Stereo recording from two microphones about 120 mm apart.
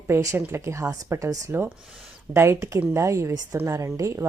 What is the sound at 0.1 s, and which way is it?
A woman's voice, 25° right (ahead or behind).